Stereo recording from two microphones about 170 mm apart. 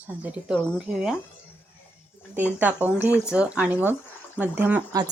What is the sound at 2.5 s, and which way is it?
Speech, 10° right (ahead or behind).